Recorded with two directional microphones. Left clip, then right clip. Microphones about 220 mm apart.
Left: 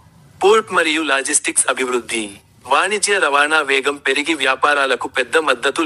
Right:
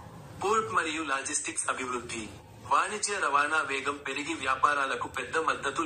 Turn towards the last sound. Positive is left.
turn(degrees=50)  # may be behind; listen again after turning